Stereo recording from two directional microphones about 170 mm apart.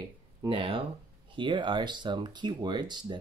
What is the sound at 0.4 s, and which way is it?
Speech, 30° right (ahead or behind).